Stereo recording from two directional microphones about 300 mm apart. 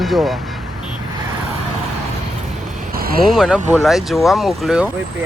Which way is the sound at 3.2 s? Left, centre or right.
Centre.